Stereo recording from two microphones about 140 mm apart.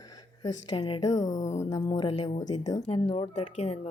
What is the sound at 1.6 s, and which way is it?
Speech, 25° left (ahead or behind).